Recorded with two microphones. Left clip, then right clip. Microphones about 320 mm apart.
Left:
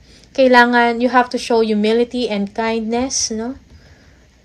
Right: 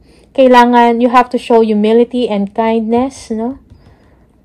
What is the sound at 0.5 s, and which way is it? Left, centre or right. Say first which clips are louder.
Speech: right 4 dB; right.